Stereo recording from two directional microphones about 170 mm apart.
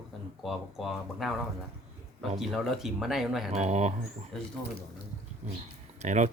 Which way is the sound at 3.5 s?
40° right (ahead or behind).